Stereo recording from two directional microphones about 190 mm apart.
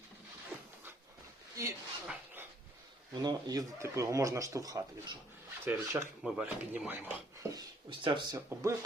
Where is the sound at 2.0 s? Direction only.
10° right (ahead or behind).